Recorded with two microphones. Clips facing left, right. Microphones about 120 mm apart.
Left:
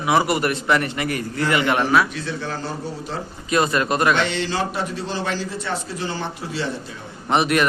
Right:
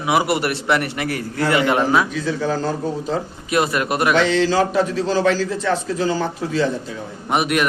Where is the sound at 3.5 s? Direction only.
10° right (ahead or behind).